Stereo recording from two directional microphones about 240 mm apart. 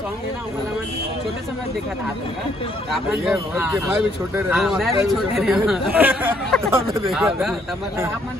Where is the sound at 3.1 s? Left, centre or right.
Centre.